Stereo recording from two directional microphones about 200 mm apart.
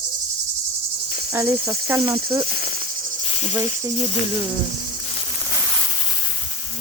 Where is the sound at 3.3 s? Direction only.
35° left (ahead or behind).